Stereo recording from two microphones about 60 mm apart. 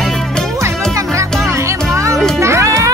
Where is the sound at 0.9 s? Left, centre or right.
Right.